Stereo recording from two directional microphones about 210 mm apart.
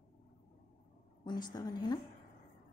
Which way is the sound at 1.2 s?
20° left (ahead or behind).